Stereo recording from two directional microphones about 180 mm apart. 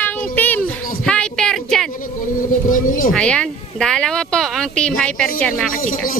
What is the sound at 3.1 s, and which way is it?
Speech, 5° left (ahead or behind).